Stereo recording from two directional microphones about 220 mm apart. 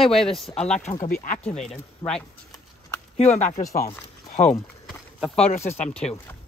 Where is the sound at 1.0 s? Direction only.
40° left (ahead or behind).